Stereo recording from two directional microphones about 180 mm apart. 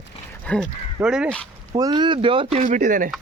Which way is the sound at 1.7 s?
25° right (ahead or behind).